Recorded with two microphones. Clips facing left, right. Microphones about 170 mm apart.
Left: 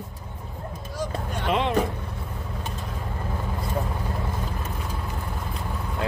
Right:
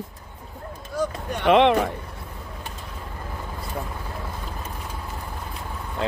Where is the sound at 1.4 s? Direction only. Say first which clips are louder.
Right 9 dB; 75° right (ahead or behind).